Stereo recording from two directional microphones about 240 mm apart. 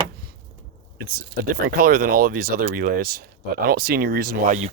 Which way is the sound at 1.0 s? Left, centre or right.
Right.